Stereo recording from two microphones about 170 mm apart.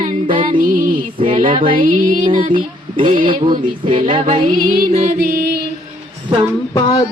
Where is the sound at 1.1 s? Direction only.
30° right (ahead or behind).